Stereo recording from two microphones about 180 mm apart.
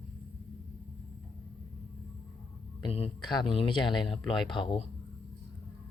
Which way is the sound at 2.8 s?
30° left (ahead or behind).